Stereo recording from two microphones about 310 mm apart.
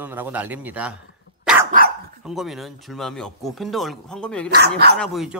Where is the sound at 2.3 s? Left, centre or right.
Centre.